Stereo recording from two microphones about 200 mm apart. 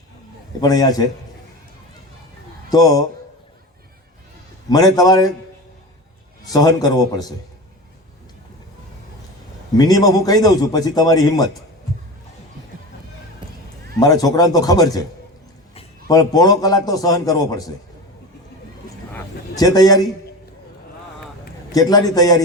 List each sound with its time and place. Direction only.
0.6 s a man's voice: 20° left (ahead or behind)
2.6 s a man's voice: 20° left (ahead or behind)
4.7 s a man's voice: 20° left (ahead or behind)
6.4 s a man's voice: 20° left (ahead or behind)
9.7 s a man's voice: 20° left (ahead or behind)
14.0 s a man's voice: 20° left (ahead or behind)
15.7 s a sound: 30° left (ahead or behind)
16.1 s a man's voice: 20° left (ahead or behind)
19.1 s a sound: 20° left (ahead or behind)
21.7 s a man's voice: 20° left (ahead or behind)